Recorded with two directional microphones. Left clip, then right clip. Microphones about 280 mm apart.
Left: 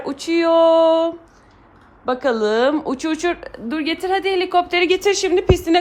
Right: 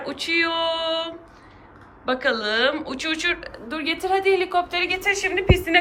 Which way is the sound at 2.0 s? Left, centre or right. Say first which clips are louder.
Left 4 dB; left.